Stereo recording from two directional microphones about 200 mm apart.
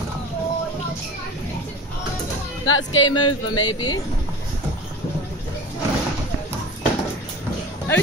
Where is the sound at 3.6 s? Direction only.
20° left (ahead or behind).